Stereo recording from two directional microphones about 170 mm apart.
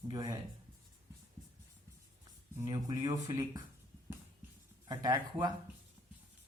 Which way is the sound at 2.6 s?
25° right (ahead or behind).